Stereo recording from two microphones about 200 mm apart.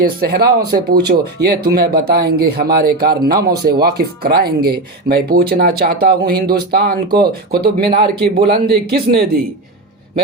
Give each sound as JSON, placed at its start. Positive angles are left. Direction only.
{"t": 0.0, "sound": "speech", "side_deg": -50}